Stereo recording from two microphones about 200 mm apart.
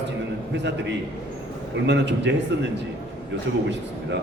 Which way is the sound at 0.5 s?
60° right (ahead or behind).